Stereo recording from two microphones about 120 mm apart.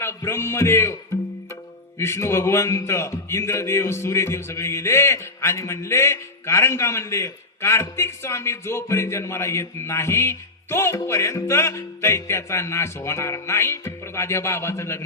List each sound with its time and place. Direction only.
0.0 s a man's voice: 25° left (ahead or behind)
2.0 s a man's voice: 20° left (ahead or behind)